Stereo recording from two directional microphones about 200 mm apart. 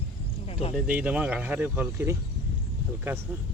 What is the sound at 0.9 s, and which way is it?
Speech, 5° right (ahead or behind).